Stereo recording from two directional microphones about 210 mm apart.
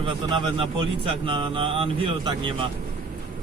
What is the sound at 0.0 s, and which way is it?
Speech, 25° right (ahead or behind).